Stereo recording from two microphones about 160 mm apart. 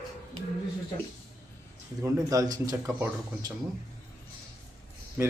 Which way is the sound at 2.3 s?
20° right (ahead or behind).